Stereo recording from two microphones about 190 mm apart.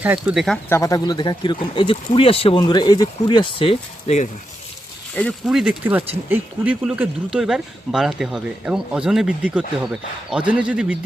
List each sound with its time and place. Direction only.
0.0 s speech: 10° right (ahead or behind)
0.7 s speech: 15° left (ahead or behind); by 4.3 s 35° left (ahead or behind)
5.5 s speech: 5° right (ahead or behind)